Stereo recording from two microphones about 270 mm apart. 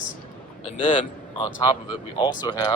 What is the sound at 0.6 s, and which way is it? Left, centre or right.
Speech, left.